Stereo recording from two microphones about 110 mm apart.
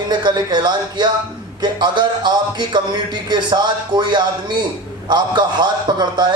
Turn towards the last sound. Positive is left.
turn(degrees=-40)  # may be behind; listen again after turning